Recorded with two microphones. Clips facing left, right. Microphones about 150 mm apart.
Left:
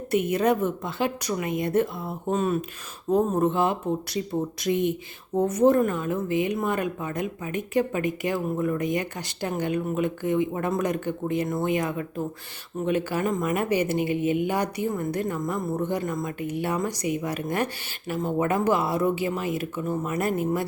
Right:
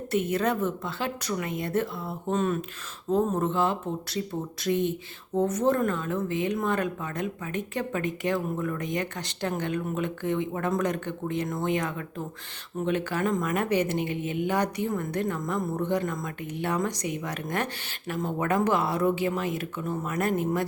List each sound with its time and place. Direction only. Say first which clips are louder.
0.1 s speech: left 4 dB; 15° left (ahead or behind)